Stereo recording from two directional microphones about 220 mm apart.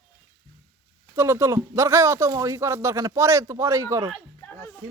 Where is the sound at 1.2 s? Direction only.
10° right (ahead or behind).